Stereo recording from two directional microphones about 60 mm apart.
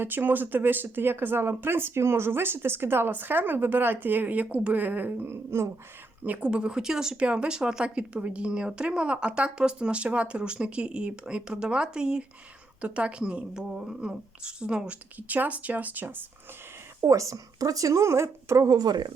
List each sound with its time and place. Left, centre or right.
0.0 s speech: right
6.2 s speech: right
6.5 s a woman's voice: centre
15.3 s speech: right
17.0 s speech: right